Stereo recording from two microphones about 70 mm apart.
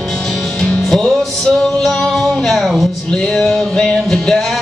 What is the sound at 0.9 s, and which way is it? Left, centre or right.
Music, centre.